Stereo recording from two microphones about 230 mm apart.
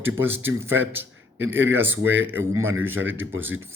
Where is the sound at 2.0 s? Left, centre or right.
Right.